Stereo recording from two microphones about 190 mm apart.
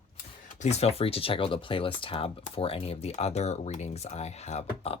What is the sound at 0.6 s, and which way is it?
Speech, 35° left (ahead or behind).